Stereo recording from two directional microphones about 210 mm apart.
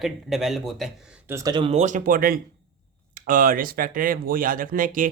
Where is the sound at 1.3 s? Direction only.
15° right (ahead or behind).